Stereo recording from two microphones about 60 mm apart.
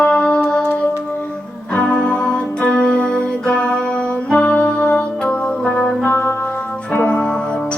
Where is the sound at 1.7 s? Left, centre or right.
Centre.